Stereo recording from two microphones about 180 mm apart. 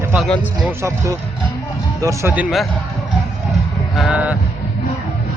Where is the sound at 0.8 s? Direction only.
15° right (ahead or behind).